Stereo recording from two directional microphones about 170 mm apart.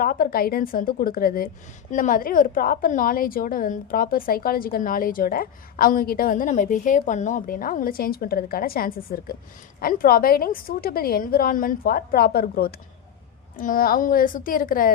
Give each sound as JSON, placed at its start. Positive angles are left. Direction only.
{"t": 0.0, "sound": "a woman's voice", "side_deg": 55}